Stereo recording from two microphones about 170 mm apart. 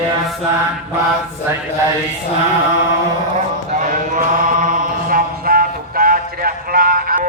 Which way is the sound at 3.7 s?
50° right (ahead or behind).